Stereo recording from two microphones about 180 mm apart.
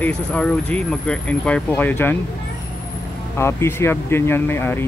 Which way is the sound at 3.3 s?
15° left (ahead or behind).